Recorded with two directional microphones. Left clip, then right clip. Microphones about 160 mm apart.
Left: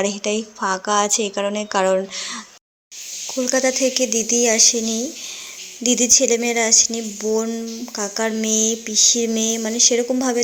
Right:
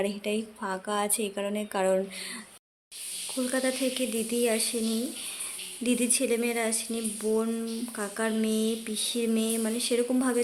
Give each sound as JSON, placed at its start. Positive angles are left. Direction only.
{"t": 0.0, "sound": "a woman's voice", "side_deg": 15}
{"t": 3.3, "sound": "a woman's voice", "side_deg": 30}